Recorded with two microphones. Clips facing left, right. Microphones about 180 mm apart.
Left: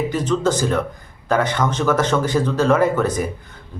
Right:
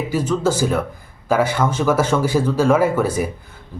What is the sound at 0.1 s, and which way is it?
Speech, 10° right (ahead or behind).